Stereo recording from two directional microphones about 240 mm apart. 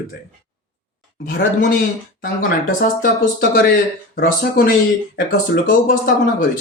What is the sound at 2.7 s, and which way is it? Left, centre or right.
A man's voice, left.